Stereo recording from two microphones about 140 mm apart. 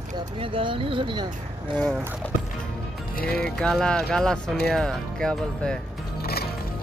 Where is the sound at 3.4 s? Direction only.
5° left (ahead or behind).